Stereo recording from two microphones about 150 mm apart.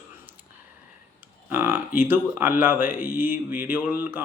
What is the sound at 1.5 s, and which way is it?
Mantra, 15° right (ahead or behind).